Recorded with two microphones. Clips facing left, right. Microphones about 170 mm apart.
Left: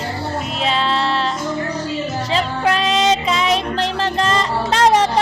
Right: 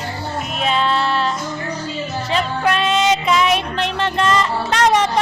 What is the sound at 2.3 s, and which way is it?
Child singing, 30° left (ahead or behind).